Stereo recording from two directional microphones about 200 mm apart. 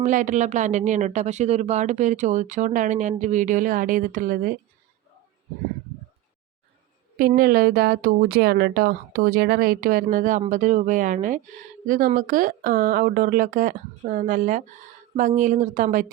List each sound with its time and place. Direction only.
0.0 s speech: 40° right (ahead or behind)
7.2 s a woman's voice: 50° right (ahead or behind)